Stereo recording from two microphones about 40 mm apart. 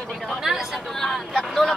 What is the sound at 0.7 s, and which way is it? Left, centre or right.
Speech, centre.